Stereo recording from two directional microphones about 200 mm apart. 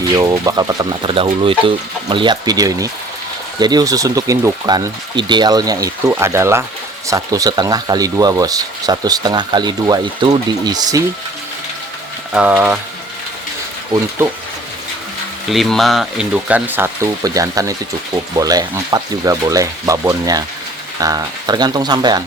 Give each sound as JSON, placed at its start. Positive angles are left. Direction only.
{"t": 0.1, "sound": "speech", "side_deg": -20}
{"t": 12.3, "sound": "speech", "side_deg": -5}
{"t": 15.4, "sound": "speech", "side_deg": 0}